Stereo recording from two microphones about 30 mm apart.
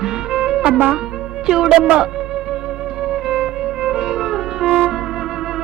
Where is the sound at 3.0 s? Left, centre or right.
Right.